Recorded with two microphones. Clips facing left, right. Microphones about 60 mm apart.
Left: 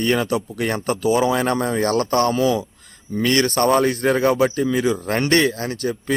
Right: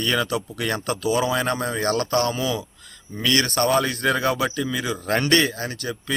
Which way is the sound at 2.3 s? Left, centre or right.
Left.